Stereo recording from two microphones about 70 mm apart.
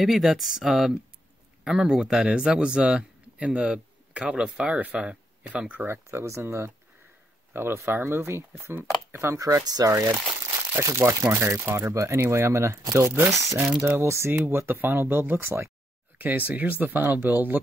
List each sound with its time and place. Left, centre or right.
0.0 s speech: centre
5.9 s speech: right
8.7 s speech: right
9.6 s speech: right
11.0 s speech: right
16.2 s speech: right